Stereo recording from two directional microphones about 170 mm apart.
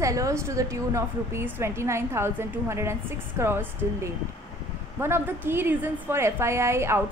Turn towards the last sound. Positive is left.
turn(degrees=-15)  # may be behind; listen again after turning